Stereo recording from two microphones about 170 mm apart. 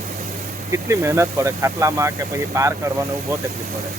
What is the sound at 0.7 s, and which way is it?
Speech, 15° right (ahead or behind).